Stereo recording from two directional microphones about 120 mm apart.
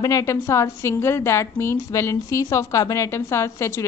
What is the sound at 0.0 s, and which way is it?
A woman's voice, 25° left (ahead or behind).